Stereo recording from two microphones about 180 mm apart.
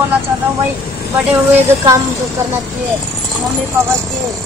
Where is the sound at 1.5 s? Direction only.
15° right (ahead or behind).